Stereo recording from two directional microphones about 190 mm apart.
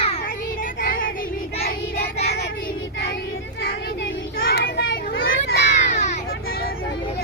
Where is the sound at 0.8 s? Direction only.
45° left (ahead or behind).